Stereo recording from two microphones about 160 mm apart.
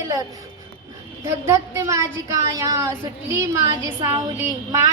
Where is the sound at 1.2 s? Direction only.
15° right (ahead or behind).